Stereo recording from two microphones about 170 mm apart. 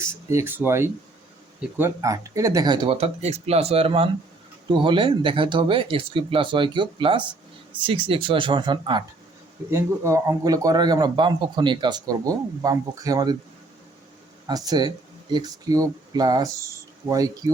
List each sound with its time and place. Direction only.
0.0 s speech: 15° right (ahead or behind)
9.6 s speech: 15° right (ahead or behind)
14.4 s speech: 20° right (ahead or behind)